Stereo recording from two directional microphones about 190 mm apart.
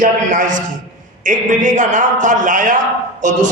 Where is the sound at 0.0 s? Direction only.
40° right (ahead or behind).